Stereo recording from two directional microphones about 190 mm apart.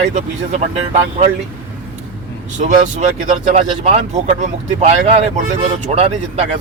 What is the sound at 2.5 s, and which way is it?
Speech, 40° right (ahead or behind).